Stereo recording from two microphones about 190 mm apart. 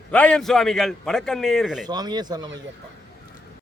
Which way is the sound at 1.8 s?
20° right (ahead or behind).